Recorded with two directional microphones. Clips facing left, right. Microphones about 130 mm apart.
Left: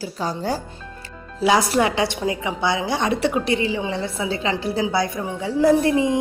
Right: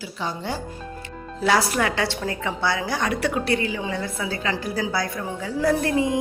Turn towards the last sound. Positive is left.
turn(degrees=20)  # may be behind; listen again after turning